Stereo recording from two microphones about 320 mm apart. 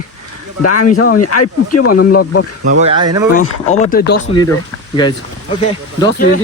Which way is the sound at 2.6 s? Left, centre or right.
Right.